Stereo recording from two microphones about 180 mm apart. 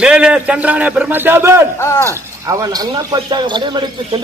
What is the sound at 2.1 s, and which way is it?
Speech, 20° right (ahead or behind).